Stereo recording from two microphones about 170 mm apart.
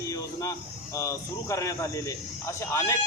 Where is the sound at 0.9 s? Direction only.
20° left (ahead or behind).